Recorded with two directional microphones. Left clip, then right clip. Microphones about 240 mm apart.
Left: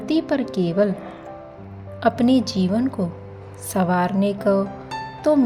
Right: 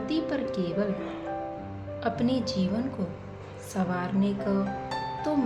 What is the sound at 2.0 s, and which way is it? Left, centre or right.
Speech, left.